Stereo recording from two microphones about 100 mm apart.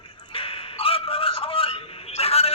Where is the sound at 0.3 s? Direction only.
65° left (ahead or behind).